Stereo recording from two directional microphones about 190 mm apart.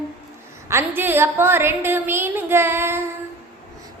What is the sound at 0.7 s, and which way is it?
A woman's voice, 10° right (ahead or behind).